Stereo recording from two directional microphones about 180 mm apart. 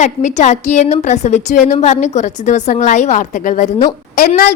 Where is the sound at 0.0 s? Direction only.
40° left (ahead or behind).